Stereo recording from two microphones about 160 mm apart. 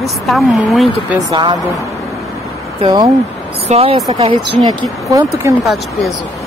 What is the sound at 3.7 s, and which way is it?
Speech, 40° right (ahead or behind).